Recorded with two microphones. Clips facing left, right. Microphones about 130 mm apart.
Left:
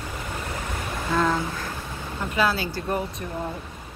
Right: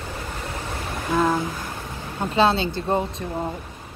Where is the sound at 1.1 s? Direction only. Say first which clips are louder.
Right 2 dB; 20° right (ahead or behind).